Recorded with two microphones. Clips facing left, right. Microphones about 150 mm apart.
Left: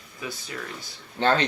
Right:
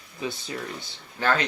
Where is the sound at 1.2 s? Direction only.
25° left (ahead or behind).